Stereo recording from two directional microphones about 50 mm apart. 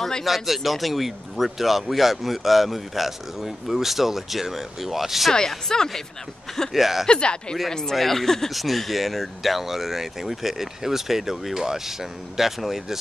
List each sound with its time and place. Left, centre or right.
0.2 s speech: centre
5.3 s speech: centre
6.7 s speech: centre
7.1 s speech: centre
7.9 s speech: centre